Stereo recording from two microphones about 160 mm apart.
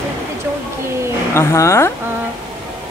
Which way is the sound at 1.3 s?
15° left (ahead or behind).